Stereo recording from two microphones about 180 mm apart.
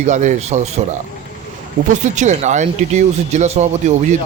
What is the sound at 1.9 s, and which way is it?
Speech, 40° right (ahead or behind).